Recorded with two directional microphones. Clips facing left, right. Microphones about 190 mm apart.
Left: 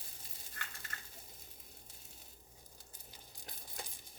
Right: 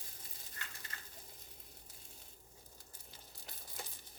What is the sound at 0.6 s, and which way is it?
Dog, 55° left (ahead or behind).